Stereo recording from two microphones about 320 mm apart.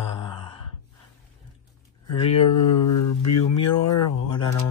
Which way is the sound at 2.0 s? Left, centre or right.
Left.